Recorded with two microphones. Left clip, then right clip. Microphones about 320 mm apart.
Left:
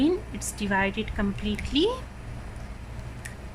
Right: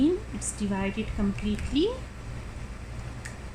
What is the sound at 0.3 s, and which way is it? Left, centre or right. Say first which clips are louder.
A woman's voice: left 6 dB; left.